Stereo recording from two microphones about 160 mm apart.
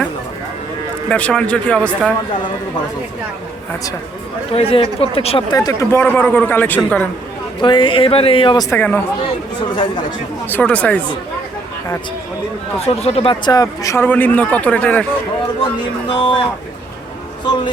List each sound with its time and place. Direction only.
1.1 s speech: 5° left (ahead or behind)
4.5 s a woman's voice: 35° left (ahead or behind)
5.5 s speech: 20° left (ahead or behind)
7.6 s a woman's voice: 30° left (ahead or behind)
8.7 s speech: 10° left (ahead or behind)
9.7 s speech: 30° left (ahead or behind)
10.5 s speech: 10° left (ahead or behind)
12.8 s speech: 40° left (ahead or behind); by 15.0 s 10° left (ahead or behind)
16.0 s a woman's voice: 30° left (ahead or behind)
17.4 s speech: 30° left (ahead or behind)